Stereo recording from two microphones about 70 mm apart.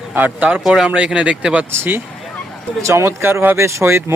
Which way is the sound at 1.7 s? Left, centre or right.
Right.